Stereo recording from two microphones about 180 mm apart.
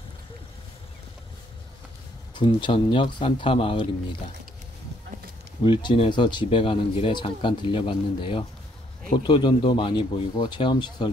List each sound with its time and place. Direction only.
2.3 s speech: 25° left (ahead or behind)
5.6 s speech: 25° left (ahead or behind)